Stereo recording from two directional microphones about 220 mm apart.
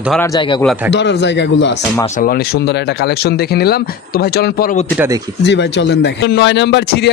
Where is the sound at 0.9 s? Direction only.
50° left (ahead or behind).